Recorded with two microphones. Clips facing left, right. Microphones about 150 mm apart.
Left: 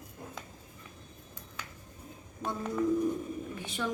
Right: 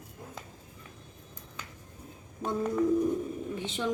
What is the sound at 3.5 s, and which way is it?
Speech, 20° right (ahead or behind).